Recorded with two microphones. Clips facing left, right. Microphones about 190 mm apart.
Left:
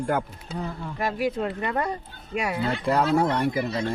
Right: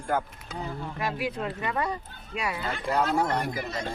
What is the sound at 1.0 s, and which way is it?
Speech, 45° left (ahead or behind).